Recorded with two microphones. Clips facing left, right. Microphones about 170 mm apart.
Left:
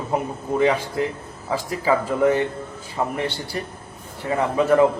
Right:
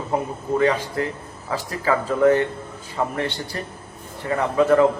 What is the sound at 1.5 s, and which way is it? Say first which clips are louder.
Speech: left 1 dB; 10° left (ahead or behind).